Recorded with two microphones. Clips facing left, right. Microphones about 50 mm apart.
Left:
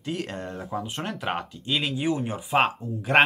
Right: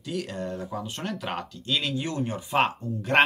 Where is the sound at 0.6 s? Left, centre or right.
Centre.